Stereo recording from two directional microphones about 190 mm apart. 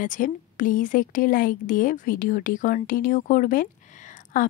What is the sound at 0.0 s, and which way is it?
A woman's voice, 45° left (ahead or behind).